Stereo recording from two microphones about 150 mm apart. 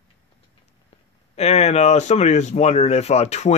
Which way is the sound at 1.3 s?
45° left (ahead or behind).